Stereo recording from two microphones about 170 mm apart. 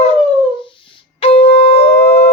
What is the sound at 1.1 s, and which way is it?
Shofar, 35° left (ahead or behind).